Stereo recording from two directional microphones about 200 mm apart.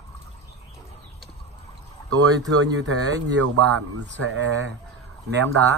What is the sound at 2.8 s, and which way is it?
Speech, 90° right.